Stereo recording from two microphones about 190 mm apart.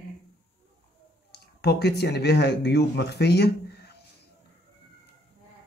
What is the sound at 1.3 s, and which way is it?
Speech, 60° left (ahead or behind).